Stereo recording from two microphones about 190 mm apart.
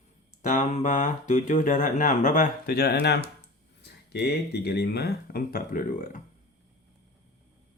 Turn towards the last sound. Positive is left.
turn(degrees=45)  # may be behind; listen again after turning